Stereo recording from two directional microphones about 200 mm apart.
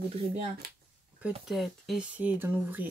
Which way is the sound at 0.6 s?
50° right (ahead or behind).